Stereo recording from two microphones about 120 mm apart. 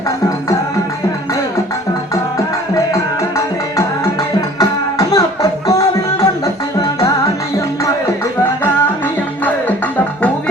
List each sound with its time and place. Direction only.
2.9 s music: 25° left (ahead or behind)